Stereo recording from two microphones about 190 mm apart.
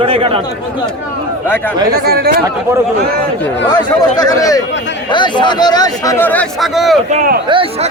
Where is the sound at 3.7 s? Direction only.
20° left (ahead or behind); by 7.0 s centre (ahead or behind).